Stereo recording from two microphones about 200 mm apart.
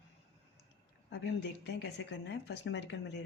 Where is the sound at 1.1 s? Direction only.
60° left (ahead or behind).